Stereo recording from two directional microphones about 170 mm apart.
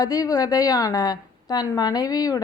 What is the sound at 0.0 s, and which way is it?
A woman's voice, 20° left (ahead or behind).